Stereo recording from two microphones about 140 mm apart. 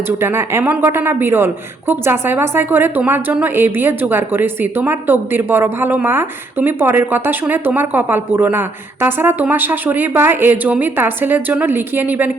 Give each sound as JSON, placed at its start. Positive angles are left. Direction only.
{"t": 0.2, "sound": "a woman's voice", "side_deg": -15}